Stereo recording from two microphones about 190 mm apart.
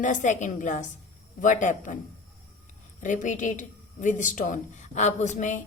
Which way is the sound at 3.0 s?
40° left (ahead or behind).